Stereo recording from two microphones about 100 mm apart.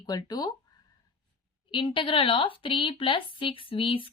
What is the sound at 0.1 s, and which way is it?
Speech, 45° left (ahead or behind).